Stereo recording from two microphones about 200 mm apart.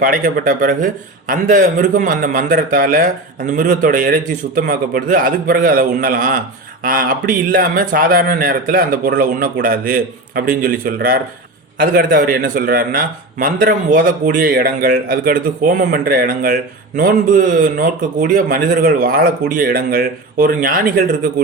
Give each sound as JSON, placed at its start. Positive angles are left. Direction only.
{"t": 0.0, "sound": "a man's voice", "side_deg": -45}